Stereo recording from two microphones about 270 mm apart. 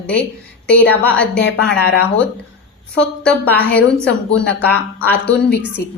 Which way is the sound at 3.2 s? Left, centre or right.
Centre.